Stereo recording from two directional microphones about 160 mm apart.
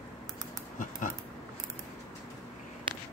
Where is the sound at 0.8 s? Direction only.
55° left (ahead or behind).